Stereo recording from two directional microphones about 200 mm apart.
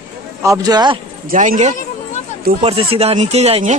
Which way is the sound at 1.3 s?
40° right (ahead or behind).